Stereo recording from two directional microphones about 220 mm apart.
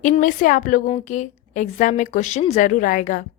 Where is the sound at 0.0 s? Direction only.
35° left (ahead or behind).